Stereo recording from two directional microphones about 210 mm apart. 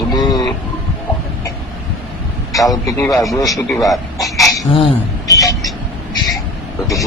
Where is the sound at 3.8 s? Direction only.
15° left (ahead or behind).